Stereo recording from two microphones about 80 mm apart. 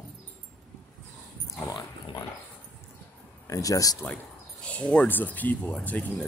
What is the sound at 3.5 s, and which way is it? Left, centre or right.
Speech, left.